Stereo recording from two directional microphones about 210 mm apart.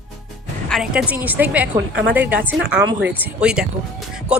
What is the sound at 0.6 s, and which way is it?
A woman's voice, centre (ahead or behind).